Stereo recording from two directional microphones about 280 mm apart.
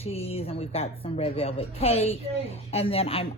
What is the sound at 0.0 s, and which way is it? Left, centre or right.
A woman's voice, left.